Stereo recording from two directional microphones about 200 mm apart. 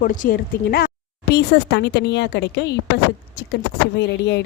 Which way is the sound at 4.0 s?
60° left (ahead or behind).